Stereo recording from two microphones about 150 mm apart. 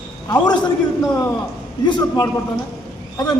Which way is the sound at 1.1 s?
20° left (ahead or behind).